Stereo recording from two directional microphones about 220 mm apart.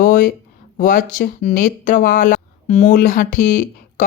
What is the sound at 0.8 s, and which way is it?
Speech, 40° left (ahead or behind).